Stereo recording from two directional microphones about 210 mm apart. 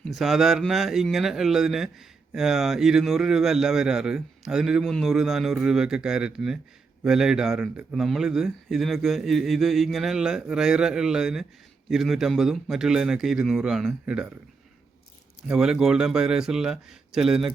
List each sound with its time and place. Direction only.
0.0 s a man's voice: centre (ahead or behind)
15.4 s a man's voice: 5° right (ahead or behind)